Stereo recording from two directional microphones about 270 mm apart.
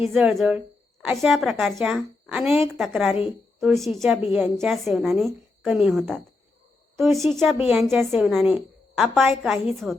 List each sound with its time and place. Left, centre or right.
0.1 s a woman's voice: centre